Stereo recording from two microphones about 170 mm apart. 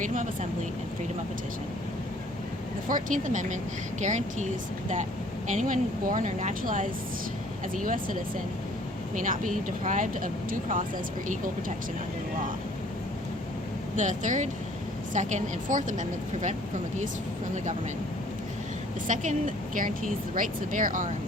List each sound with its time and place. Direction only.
0.0 s speech: 50° right (ahead or behind)
2.9 s speech: 50° right (ahead or behind)
5.5 s speech: 45° right (ahead or behind)
9.1 s speech: 50° right (ahead or behind)
13.9 s speech: 45° right (ahead or behind)
19.0 s speech: 50° right (ahead or behind)